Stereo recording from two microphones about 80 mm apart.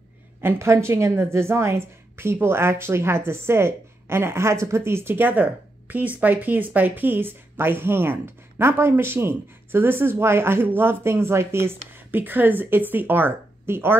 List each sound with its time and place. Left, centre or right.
0.4 s a woman's voice: right